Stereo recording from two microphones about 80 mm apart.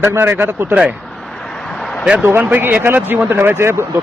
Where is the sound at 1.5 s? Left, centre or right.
Centre.